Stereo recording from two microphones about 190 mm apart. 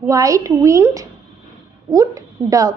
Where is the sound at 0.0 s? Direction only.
15° right (ahead or behind).